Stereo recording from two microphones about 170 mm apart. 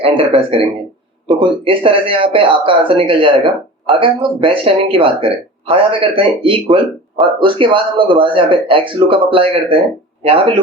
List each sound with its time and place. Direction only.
0.2 s speech: 30° right (ahead or behind)